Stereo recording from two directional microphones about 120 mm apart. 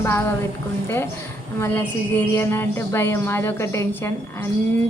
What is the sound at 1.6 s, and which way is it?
Speech, 15° left (ahead or behind).